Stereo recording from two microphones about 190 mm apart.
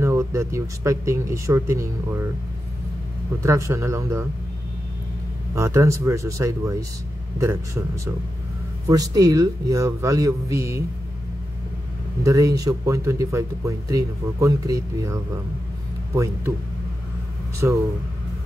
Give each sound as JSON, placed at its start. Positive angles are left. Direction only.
{"t": 0.0, "sound": "speech", "side_deg": -15}
{"t": 3.4, "sound": "a man's voice", "side_deg": -15}
{"t": 5.5, "sound": "a man's voice", "side_deg": -15}
{"t": 12.2, "sound": "a man's voice", "side_deg": -15}
{"t": 17.6, "sound": "a man's voice", "side_deg": -15}